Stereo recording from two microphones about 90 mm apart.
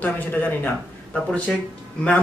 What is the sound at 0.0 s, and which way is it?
Speech, 20° left (ahead or behind).